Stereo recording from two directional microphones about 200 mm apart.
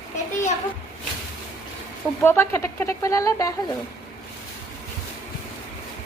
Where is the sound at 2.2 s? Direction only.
10° left (ahead or behind).